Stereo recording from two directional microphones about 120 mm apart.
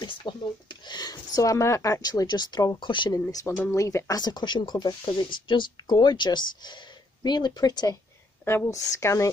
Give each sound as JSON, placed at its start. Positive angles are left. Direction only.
{"t": 0.0, "sound": "speech", "side_deg": 40}